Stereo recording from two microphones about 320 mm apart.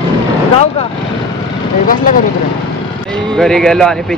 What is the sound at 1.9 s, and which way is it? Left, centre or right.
Speech, left.